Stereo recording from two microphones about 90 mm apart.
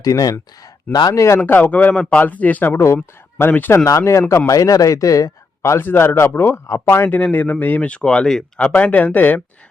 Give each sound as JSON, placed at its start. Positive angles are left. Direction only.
{"t": 0.0, "sound": "speech", "side_deg": 45}
{"t": 1.1, "sound": "a man's voice", "side_deg": 35}
{"t": 1.4, "sound": "speech", "side_deg": 20}
{"t": 3.8, "sound": "a man's voice", "side_deg": 35}